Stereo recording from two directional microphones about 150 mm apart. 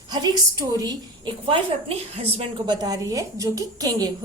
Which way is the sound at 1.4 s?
40° right (ahead or behind).